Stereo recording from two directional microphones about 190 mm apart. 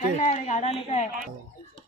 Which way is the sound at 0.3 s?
40° left (ahead or behind).